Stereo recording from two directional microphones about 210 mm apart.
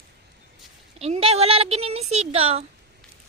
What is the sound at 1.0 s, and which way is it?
Speech, 30° right (ahead or behind).